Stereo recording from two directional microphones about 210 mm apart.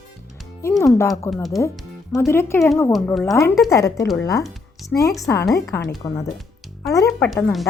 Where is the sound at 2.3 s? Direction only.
10° left (ahead or behind).